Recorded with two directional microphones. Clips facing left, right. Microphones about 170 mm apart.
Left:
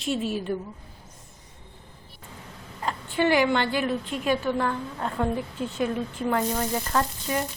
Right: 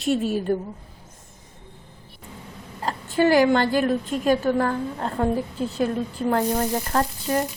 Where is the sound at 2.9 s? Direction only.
40° right (ahead or behind).